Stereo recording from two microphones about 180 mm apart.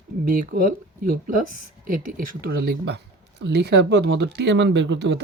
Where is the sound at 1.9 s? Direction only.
50° right (ahead or behind); by 5.2 s 70° right (ahead or behind).